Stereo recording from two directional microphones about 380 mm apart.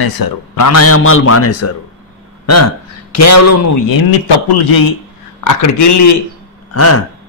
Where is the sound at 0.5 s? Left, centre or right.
Left.